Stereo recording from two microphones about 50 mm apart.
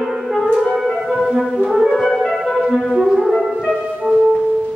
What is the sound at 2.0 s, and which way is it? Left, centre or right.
Music, centre.